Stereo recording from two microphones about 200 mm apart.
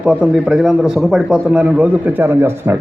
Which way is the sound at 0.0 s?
5° right (ahead or behind).